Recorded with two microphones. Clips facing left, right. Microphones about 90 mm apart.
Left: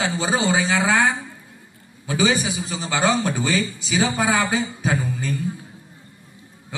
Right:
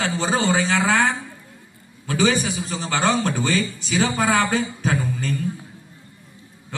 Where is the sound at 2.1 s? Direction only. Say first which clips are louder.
Even; 10° left (ahead or behind).